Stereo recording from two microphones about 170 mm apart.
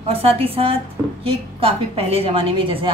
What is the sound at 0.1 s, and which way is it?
A woman's voice, 35° right (ahead or behind).